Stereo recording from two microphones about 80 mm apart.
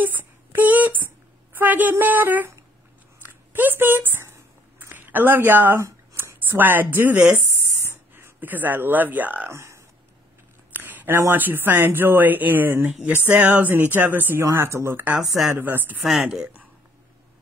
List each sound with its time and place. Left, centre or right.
0.0 s a woman's voice: right
3.5 s a sound: right
6.1 s speech: right
9.5 s speech: right
10.7 s speech: right
15.1 s speech: centre
15.5 s speech: right
16.0 s speech: centre
16.3 s speech: centre